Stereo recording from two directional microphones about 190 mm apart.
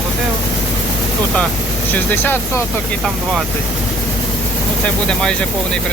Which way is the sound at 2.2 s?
10° left (ahead or behind).